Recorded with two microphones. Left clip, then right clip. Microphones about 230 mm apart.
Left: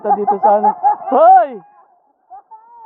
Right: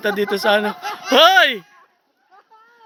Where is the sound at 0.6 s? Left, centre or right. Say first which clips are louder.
Left 11 dB; centre.